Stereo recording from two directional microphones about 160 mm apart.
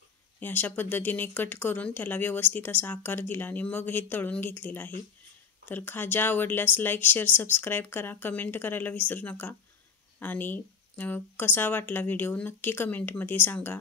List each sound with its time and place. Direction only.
0.4 s speech: 10° left (ahead or behind)